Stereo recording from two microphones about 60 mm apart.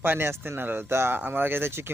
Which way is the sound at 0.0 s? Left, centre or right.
Right.